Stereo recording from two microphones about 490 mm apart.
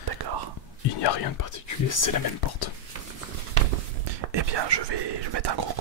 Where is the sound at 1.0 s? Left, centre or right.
Left.